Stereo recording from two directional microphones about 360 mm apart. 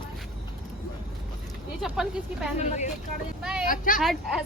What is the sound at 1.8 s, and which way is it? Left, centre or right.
Speech, centre.